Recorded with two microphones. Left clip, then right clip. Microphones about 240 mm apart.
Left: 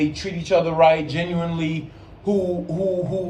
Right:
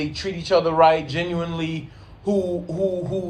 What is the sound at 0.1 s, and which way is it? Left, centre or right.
A man's voice, centre.